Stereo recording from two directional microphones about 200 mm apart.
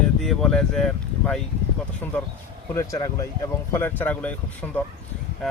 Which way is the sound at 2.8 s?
15° left (ahead or behind).